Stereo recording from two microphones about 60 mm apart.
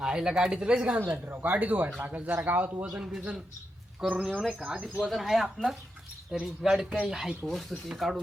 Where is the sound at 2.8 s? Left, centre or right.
Centre.